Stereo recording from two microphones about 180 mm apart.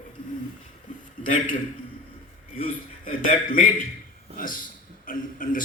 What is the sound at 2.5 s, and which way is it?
A man's voice, 50° left (ahead or behind).